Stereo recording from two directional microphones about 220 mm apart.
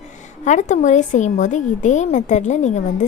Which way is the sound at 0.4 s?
35° left (ahead or behind).